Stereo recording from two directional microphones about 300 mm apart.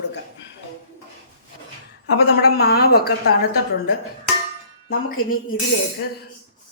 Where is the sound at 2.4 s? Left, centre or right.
Left.